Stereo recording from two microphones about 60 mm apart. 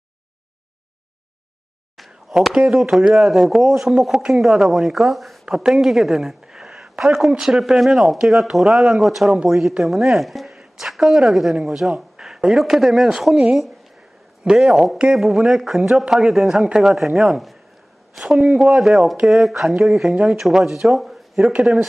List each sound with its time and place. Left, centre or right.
2.0 s a sound: centre
2.6 s a woman's voice: centre
5.5 s a woman's voice: centre
9.2 s speech: centre
9.5 s a woman's voice: centre
14.4 s speech: centre
14.7 s a woman's voice: centre
20.1 s speech: right
20.3 s speech: centre
21.5 s speech: centre